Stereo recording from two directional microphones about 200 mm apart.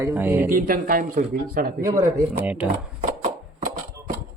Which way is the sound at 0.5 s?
45° right (ahead or behind).